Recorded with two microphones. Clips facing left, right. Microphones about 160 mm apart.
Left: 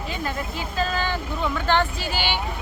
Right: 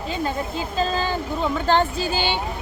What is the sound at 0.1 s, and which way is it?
Speech, 25° right (ahead or behind).